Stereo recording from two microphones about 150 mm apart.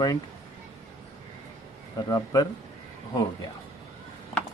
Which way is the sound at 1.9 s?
25° left (ahead or behind).